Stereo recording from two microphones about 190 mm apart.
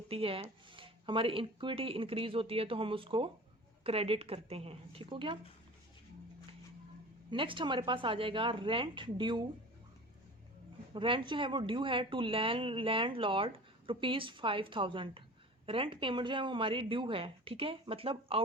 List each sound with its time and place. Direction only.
0.1 s a woman's voice: 30° right (ahead or behind)
7.3 s a woman's voice: 25° right (ahead or behind)
10.9 s a woman's voice: 25° right (ahead or behind)